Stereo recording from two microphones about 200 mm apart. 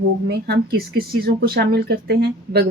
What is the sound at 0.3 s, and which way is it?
Speech, 55° right (ahead or behind).